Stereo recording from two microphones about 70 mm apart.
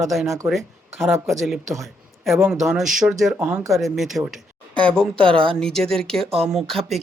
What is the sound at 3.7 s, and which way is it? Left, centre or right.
Speech, centre.